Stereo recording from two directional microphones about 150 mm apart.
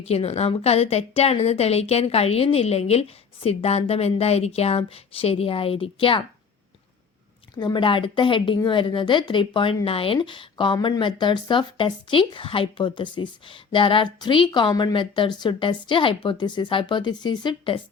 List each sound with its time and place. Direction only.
0.1 s a woman's voice: 40° left (ahead or behind)
7.5 s speech: 30° left (ahead or behind)